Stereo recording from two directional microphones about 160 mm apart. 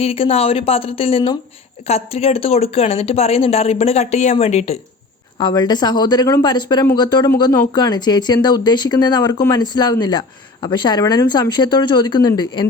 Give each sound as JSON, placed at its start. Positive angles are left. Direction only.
{"t": 0.0, "sound": "speech", "side_deg": 40}
{"t": 5.4, "sound": "speech", "side_deg": 25}